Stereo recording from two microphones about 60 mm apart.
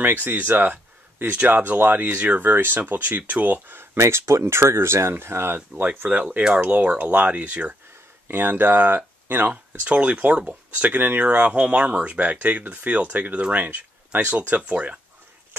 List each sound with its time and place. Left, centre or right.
0.0 s speech: right
2.5 s speech: right
3.9 s speech: right
5.8 s speech: right
8.3 s speech: right